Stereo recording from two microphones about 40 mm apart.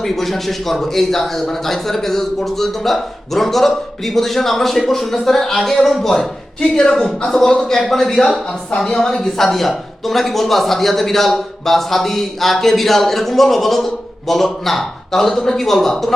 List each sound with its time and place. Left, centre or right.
0.0 s a man's voice: centre
6.6 s speech: left
7.7 s a man's voice: centre